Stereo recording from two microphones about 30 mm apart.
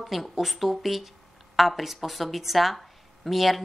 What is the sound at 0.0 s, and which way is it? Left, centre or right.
Speech, centre.